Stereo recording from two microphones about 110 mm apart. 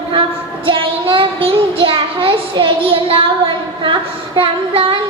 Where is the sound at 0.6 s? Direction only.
55° right (ahead or behind).